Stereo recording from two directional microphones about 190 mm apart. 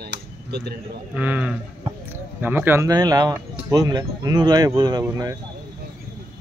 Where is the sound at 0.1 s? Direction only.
60° right (ahead or behind).